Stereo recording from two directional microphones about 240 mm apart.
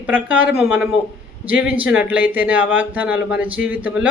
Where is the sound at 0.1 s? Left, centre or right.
Centre.